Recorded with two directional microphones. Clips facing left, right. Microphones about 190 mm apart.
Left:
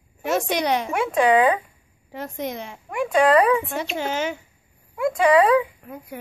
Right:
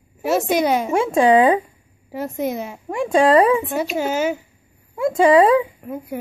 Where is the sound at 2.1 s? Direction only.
5° right (ahead or behind).